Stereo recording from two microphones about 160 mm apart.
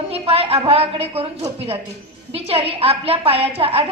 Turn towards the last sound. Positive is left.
turn(degrees=-35)  # may be behind; listen again after turning